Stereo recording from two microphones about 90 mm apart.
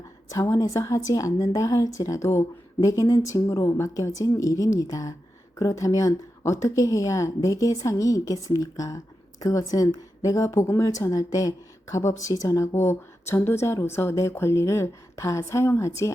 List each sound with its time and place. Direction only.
0.3 s speech: 35° left (ahead or behind)